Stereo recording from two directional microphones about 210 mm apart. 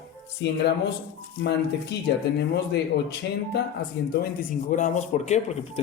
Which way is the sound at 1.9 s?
50° left (ahead or behind).